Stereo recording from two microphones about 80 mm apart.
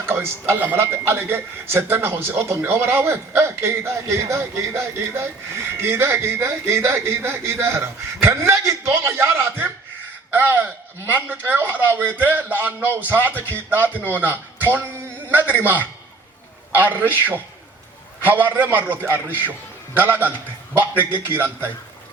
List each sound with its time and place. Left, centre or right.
0.0 s a man's voice: right
13.9 s a man's voice: left
14.7 s a man's voice: right